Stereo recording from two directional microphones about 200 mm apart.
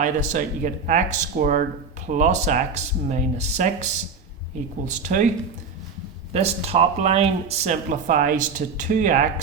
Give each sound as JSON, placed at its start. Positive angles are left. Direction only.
{"t": 0.0, "sound": "speech", "side_deg": -40}
{"t": 4.9, "sound": "speech", "side_deg": -40}
{"t": 6.3, "sound": "speech", "side_deg": -30}